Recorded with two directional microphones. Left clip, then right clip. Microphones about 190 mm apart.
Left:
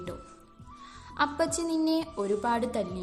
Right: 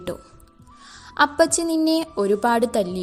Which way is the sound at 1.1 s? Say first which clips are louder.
Right 10 dB; 35° right (ahead or behind).